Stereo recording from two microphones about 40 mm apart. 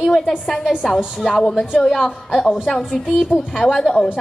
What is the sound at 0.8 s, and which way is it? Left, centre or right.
A woman's voice, centre.